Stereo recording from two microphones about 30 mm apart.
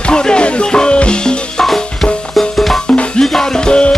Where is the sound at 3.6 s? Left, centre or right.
Left.